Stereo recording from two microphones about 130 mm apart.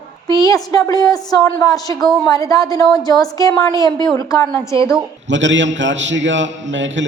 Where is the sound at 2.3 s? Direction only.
25° left (ahead or behind).